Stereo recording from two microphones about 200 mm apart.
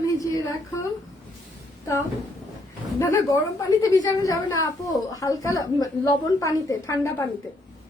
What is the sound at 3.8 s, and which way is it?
A woman's voice, 15° left (ahead or behind).